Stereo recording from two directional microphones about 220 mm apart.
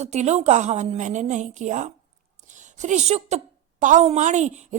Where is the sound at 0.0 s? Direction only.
30° right (ahead or behind).